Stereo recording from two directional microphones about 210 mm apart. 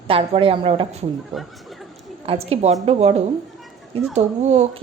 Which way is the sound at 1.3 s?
Centre (ahead or behind).